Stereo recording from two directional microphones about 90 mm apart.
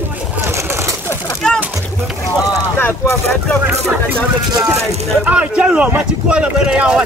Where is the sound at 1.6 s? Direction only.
5° right (ahead or behind).